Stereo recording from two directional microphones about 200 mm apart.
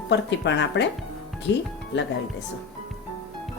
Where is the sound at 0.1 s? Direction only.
60° left (ahead or behind).